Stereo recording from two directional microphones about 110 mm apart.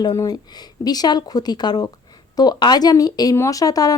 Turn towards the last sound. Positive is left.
turn(degrees=35)  # may be behind; listen again after turning